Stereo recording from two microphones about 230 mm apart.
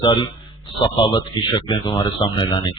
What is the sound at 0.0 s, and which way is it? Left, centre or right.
Speech, centre.